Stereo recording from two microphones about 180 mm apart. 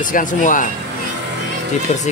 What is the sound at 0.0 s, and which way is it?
Speech, 45° left (ahead or behind).